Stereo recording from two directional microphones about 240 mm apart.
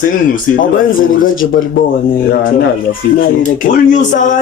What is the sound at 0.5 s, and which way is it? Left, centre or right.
Speech, left.